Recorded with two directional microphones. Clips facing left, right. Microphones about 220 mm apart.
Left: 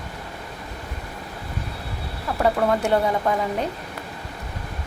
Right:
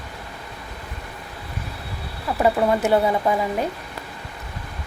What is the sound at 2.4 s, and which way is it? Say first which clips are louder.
Speech: right 2 dB; 10° right (ahead or behind).